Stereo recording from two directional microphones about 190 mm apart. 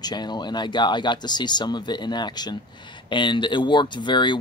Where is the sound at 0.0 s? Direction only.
20° left (ahead or behind).